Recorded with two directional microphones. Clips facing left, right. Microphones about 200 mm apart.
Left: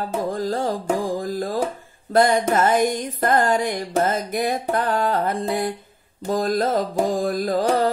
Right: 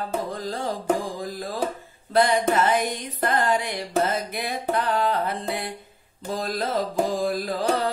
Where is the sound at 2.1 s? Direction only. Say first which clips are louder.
Left 3 dB; 45° left (ahead or behind).